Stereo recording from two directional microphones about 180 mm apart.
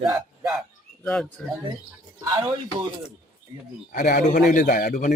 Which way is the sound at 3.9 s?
50° left (ahead or behind).